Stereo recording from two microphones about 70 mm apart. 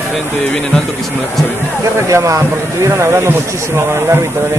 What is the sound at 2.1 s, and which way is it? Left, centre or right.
Speech, right.